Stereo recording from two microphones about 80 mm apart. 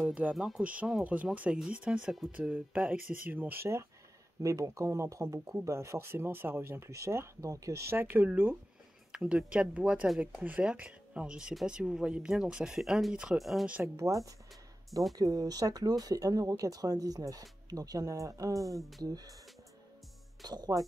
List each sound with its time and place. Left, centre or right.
0.0 s speech: centre
1.5 s speech: centre
2.5 s speech: centre
4.4 s speech: right
7.9 s speech: right
9.1 s speech: centre
15.1 s speech: right
18.8 s speech: centre
19.0 s speech: right
20.4 s speech: right